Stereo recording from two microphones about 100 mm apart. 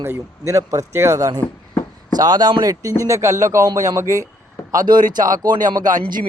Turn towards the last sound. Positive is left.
turn(degrees=-40)  # may be behind; listen again after turning